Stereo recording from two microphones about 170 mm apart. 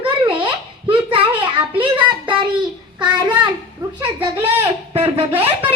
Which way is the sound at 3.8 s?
20° right (ahead or behind).